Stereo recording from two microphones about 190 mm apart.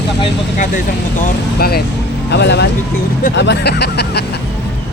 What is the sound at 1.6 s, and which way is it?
Speech, 55° left (ahead or behind).